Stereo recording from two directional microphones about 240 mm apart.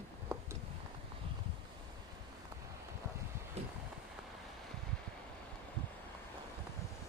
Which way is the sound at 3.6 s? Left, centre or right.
Right.